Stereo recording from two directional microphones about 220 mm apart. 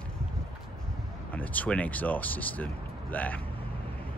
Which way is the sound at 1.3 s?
5° left (ahead or behind).